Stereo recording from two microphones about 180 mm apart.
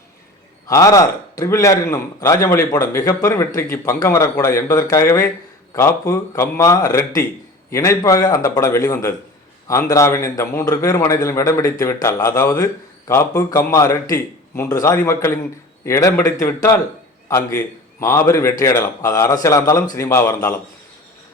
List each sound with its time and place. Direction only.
0.7 s a man's voice: 20° left (ahead or behind)
18.0 s a man's voice: 15° left (ahead or behind)